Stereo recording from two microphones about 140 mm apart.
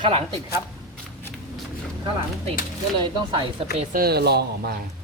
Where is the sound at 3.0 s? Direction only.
35° right (ahead or behind).